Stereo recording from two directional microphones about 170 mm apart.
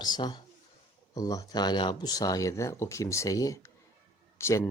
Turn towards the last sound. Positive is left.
turn(degrees=15)  # may be behind; listen again after turning